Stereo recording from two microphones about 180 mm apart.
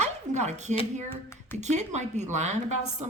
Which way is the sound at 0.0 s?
40° right (ahead or behind).